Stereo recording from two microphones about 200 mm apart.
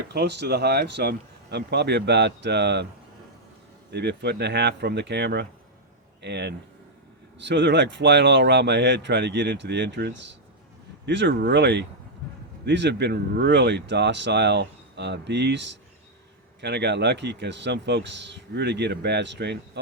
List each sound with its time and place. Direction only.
0.1 s speech: 55° right (ahead or behind)
3.9 s speech: 55° right (ahead or behind)